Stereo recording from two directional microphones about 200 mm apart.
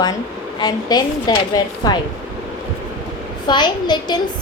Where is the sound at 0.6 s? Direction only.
20° left (ahead or behind).